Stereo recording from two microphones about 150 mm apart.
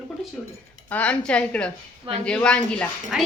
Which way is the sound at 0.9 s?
10° left (ahead or behind).